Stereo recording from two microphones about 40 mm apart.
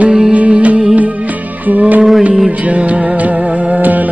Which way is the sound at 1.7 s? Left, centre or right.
Right.